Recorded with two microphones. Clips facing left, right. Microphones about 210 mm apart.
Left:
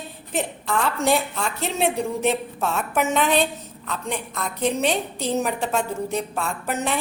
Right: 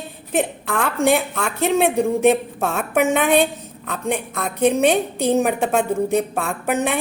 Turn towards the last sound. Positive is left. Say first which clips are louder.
# right 5 dB
turn(degrees=-55)  # may be behind; listen again after turning